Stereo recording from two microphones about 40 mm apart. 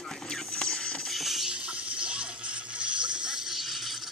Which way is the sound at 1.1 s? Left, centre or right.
Centre.